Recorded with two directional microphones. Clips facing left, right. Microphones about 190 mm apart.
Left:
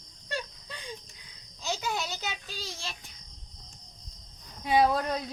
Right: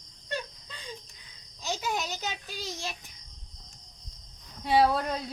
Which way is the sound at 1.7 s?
15° right (ahead or behind).